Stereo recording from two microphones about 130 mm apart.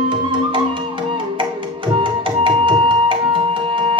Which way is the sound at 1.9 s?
40° right (ahead or behind).